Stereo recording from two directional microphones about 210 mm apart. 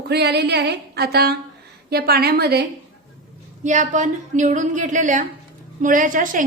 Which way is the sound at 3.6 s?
35° right (ahead or behind).